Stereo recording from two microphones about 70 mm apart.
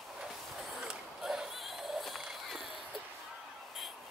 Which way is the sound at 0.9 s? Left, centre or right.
Centre.